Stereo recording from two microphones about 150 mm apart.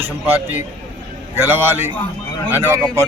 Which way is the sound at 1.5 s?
15° right (ahead or behind).